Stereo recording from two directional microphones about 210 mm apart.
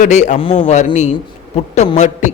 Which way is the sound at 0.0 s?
35° left (ahead or behind).